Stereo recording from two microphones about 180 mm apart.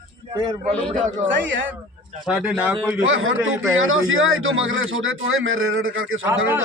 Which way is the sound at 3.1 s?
90° right.